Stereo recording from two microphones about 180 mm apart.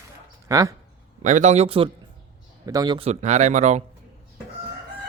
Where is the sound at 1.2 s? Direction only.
40° right (ahead or behind).